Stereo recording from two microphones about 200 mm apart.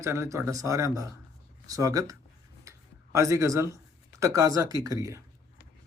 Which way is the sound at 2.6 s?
15° right (ahead or behind).